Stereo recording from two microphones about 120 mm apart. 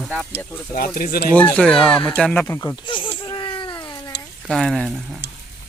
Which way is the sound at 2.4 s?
20° left (ahead or behind).